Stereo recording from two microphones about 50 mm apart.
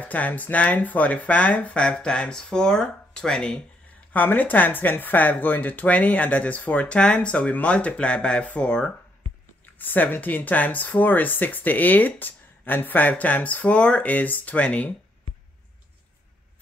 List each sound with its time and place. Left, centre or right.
0.0 s speech: left; by 3.6 s centre
4.1 s speech: left
9.8 s speech: left